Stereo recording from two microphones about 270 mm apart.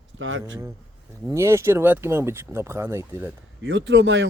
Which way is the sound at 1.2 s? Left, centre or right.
Centre.